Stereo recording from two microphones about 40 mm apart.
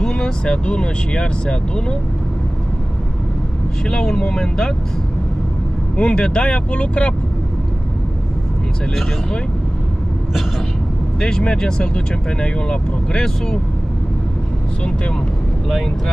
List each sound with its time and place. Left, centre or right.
0.0 s speech: left
3.8 s speech: centre
5.9 s speech: left
11.1 s speech: centre